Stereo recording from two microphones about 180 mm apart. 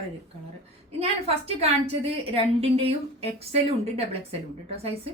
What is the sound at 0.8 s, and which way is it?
A woman's voice, 35° right (ahead or behind).